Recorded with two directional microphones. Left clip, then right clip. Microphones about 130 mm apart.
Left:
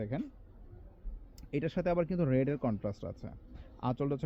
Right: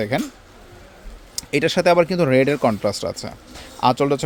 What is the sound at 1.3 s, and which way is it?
Speech, 30° right (ahead or behind).